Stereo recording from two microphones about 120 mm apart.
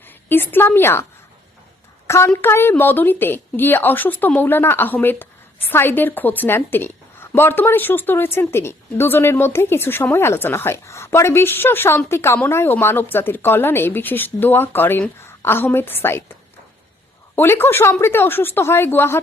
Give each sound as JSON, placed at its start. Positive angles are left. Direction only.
{"t": 0.0, "sound": "a woman's voice", "side_deg": 15}
{"t": 2.0, "sound": "a woman's voice", "side_deg": 25}